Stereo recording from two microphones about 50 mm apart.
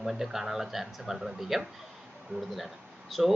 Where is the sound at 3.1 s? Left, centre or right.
Centre.